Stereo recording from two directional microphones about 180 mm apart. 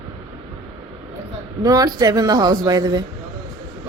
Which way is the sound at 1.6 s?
20° right (ahead or behind).